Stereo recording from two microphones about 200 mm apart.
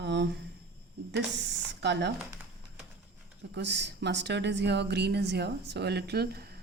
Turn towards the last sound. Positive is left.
turn(degrees=-50)  # may be behind; listen again after turning